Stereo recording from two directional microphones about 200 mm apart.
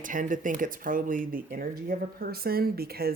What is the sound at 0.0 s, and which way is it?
Speech, 40° right (ahead or behind).